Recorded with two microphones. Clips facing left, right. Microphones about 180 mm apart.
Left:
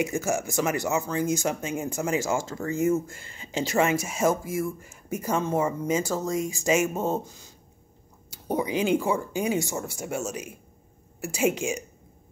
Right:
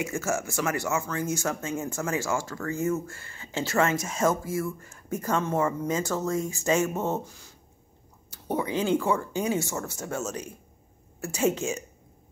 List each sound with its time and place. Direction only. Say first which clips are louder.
0.0 s speech: left 3 dB; 15° left (ahead or behind)